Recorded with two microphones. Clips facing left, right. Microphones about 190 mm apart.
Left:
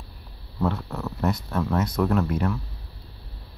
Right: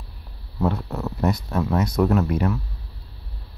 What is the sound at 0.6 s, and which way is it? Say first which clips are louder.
Speech: right 2 dB; 20° right (ahead or behind).